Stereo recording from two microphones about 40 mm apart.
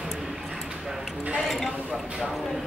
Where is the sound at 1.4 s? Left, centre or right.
Centre.